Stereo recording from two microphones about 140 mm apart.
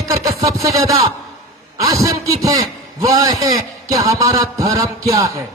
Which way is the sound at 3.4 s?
25° right (ahead or behind).